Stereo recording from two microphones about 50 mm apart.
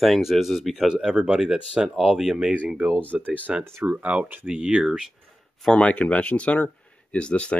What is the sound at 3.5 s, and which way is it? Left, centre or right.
Speech, centre.